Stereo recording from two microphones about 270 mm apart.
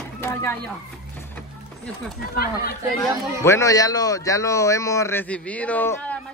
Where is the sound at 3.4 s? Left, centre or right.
Centre.